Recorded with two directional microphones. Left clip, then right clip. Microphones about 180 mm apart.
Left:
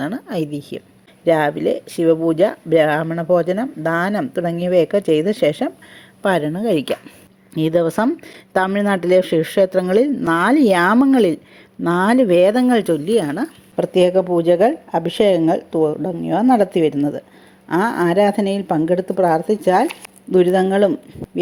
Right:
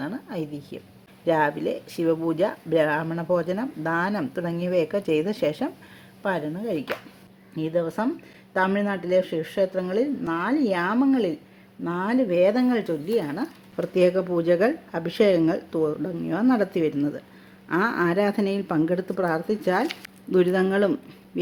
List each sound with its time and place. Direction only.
0.0 s a woman's voice: 35° left (ahead or behind)
6.2 s a woman's voice: 40° left (ahead or behind); by 20.9 s 25° left (ahead or behind)